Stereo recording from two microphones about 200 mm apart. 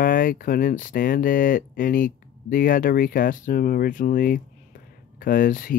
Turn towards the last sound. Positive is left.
turn(degrees=45)  # may be behind; listen again after turning